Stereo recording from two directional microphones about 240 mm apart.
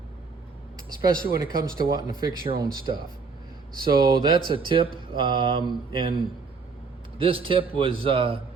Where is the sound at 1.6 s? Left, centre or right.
Right.